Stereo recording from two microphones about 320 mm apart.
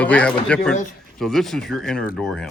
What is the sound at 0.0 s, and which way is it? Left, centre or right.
Speech, centre.